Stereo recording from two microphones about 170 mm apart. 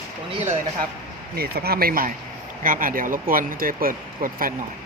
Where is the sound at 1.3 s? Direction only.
65° right (ahead or behind).